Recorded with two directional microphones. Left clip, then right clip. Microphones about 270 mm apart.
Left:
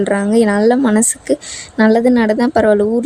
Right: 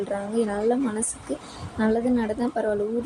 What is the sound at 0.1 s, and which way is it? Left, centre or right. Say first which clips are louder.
Speech: left 13 dB; left.